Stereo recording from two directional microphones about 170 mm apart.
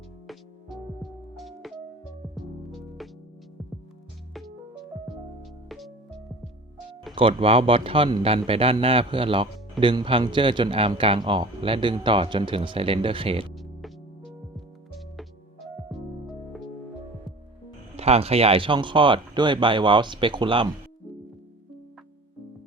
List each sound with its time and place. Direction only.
1.4 s music: centre (ahead or behind)
5.0 s music: centre (ahead or behind)
7.2 s speech: 35° right (ahead or behind)
13.5 s music: centre (ahead or behind)
17.9 s speech: 35° right (ahead or behind)